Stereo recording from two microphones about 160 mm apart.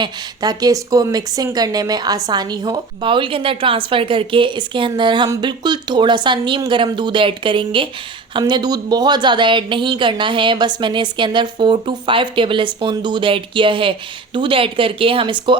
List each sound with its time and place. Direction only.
0.0 s a woman's voice: 25° right (ahead or behind)